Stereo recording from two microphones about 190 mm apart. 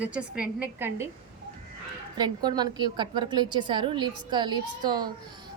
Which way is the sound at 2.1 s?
20° right (ahead or behind).